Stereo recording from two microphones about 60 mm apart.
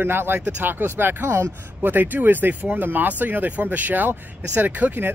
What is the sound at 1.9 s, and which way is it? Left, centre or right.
Speech, right.